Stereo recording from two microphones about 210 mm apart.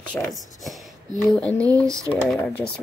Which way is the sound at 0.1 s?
5° left (ahead or behind).